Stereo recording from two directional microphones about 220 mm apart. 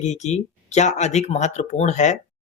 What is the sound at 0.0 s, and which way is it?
Speech, 30° left (ahead or behind).